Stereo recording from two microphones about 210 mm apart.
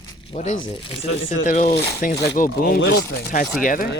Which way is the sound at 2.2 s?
30° left (ahead or behind).